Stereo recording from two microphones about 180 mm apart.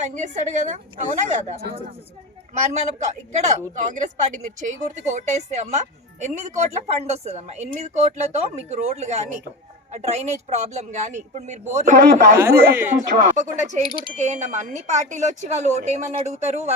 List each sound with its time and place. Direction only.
0.0 s speech: 40° right (ahead or behind)
2.6 s speech: 40° right (ahead or behind)
12.4 s a woman's voice: 15° right (ahead or behind)
13.0 s speech: 45° right (ahead or behind)